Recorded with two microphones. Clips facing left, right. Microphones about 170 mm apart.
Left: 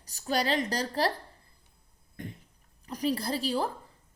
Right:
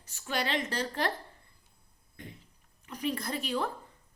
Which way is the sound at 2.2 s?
50° left (ahead or behind).